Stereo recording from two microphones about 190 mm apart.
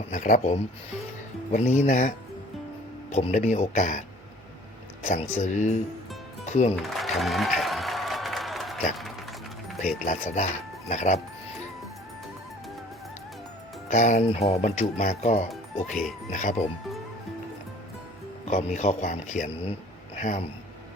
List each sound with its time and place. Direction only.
0.1 s speech: 40° left (ahead or behind)
5.0 s speech: 35° left (ahead or behind)
6.7 s applause: centre (ahead or behind)
9.7 s speech: centre (ahead or behind)
10.0 s speech: 40° left (ahead or behind)
13.8 s speech: 40° left (ahead or behind)
15.4 s speech: centre (ahead or behind)
16.3 s speech: 40° left (ahead or behind)
18.4 s speech: 35° left (ahead or behind)